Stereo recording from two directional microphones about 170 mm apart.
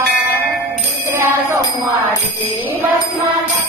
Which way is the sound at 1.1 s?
15° right (ahead or behind).